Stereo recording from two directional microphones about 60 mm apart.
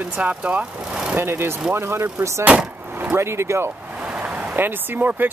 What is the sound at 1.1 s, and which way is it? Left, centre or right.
Speech, right.